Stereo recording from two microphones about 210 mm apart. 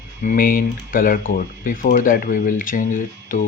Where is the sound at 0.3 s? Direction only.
40° left (ahead or behind).